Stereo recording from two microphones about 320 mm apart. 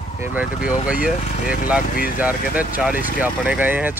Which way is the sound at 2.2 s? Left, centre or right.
Centre.